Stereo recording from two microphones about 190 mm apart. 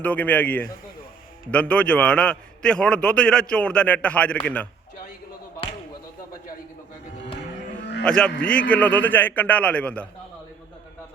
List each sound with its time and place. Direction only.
0.0 s a man's voice: 10° left (ahead or behind)
7.8 s a sound: 65° left (ahead or behind)
8.0 s a man's voice: 5° left (ahead or behind)